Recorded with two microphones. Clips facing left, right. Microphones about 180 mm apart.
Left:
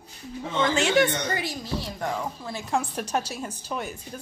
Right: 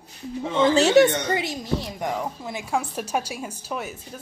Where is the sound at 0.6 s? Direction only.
35° right (ahead or behind).